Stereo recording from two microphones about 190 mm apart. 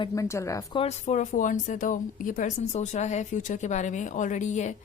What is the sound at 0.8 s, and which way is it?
A woman's voice, 35° left (ahead or behind).